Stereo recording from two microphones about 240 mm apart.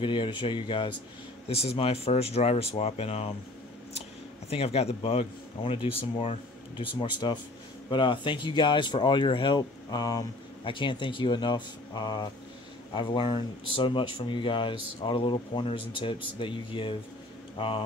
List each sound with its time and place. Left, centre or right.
0.0 s speech: left
4.5 s speech: left